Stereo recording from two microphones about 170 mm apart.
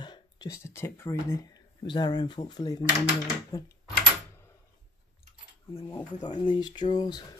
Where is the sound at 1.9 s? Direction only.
25° left (ahead or behind).